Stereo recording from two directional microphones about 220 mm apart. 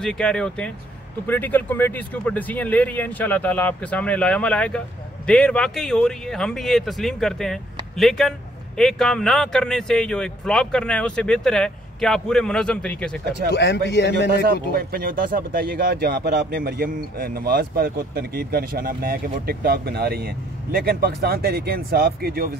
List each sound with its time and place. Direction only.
0.0 s speech: 5° left (ahead or behind)
13.5 s a man's voice: 50° left (ahead or behind)
14.5 s speech: 45° right (ahead or behind)